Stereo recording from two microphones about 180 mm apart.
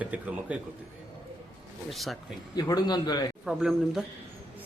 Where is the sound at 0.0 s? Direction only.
5° right (ahead or behind).